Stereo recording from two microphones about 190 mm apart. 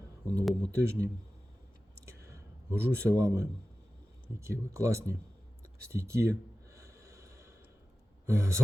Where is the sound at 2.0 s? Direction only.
15° right (ahead or behind).